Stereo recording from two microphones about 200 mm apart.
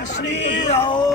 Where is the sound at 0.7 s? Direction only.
25° left (ahead or behind).